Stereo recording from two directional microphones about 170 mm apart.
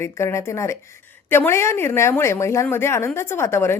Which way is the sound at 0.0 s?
15° left (ahead or behind).